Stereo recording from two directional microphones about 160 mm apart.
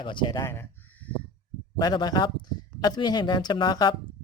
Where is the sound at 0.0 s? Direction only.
30° left (ahead or behind).